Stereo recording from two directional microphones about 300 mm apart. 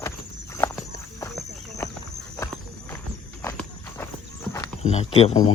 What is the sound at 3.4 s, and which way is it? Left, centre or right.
Walk, centre.